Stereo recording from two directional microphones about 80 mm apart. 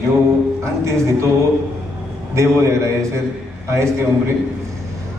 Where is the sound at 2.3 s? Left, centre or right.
Right.